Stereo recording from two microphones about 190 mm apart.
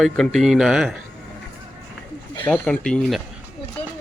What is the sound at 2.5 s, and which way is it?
Speech, 5° left (ahead or behind).